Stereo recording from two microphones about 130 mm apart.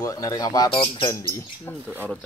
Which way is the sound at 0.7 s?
40° left (ahead or behind).